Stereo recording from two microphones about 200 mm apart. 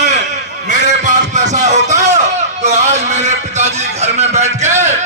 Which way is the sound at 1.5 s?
35° right (ahead or behind).